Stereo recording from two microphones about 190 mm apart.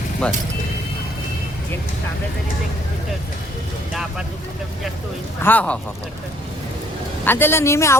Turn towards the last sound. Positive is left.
turn(degrees=15)  # may be behind; listen again after turning